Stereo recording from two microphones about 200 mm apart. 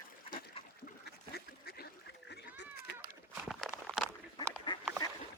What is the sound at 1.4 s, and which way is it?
Duck, 50° left (ahead or behind).